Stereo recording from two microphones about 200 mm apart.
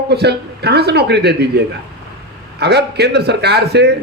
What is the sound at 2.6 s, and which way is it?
Speech, 55° right (ahead or behind).